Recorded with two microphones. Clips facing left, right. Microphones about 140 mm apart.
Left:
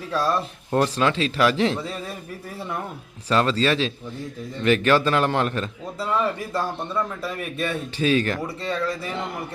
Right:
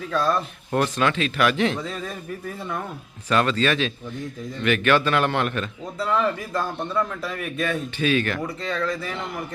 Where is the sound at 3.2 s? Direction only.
30° left (ahead or behind).